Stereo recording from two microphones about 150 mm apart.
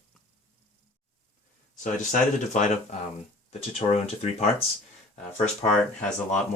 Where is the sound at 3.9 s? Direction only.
45° left (ahead or behind).